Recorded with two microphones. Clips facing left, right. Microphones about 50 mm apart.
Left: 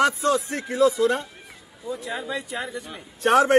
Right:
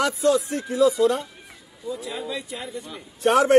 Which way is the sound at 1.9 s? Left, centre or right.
Left.